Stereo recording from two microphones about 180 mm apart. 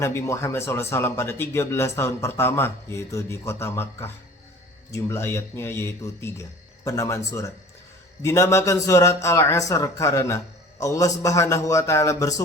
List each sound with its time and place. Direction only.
0.0 s a man's voice: 15° left (ahead or behind)